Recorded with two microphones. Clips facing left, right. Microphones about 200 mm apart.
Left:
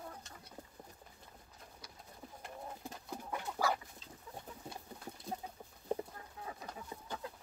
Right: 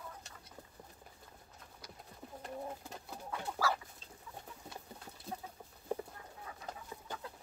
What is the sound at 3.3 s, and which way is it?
Chicken, 15° left (ahead or behind).